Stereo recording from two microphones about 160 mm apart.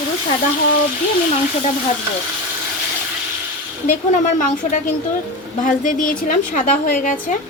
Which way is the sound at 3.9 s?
50° left (ahead or behind).